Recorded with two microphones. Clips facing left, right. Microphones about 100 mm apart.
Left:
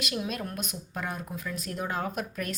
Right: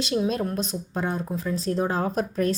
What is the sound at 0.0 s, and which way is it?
A woman's voice, 30° right (ahead or behind).